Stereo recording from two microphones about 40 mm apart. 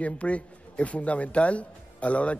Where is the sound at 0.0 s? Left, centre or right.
Left.